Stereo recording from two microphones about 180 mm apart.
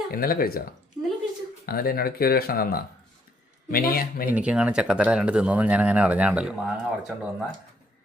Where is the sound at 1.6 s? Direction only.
55° left (ahead or behind).